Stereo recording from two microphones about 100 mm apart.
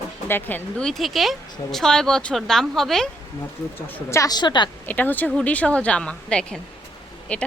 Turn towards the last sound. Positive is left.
turn(degrees=10)  # may be behind; listen again after turning